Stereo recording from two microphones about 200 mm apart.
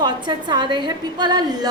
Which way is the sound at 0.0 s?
20° right (ahead or behind).